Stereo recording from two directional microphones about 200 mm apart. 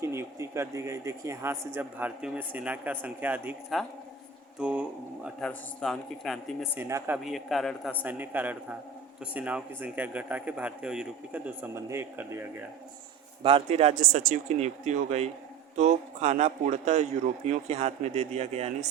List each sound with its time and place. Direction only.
0.0 s speech: 15° right (ahead or behind)
6.7 s speech: 10° right (ahead or behind)
7.3 s speech: centre (ahead or behind)
13.4 s a man's voice: 30° right (ahead or behind)